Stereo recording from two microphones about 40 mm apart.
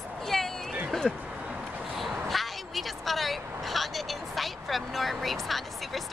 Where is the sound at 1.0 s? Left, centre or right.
Right.